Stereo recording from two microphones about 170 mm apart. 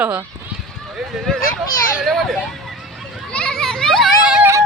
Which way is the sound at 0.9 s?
Centre (ahead or behind).